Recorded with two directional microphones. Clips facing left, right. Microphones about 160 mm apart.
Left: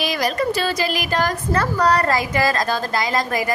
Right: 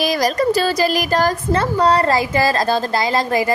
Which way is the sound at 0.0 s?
40° right (ahead or behind).